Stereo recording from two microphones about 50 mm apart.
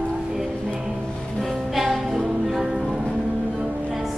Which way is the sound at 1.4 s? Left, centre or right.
Centre.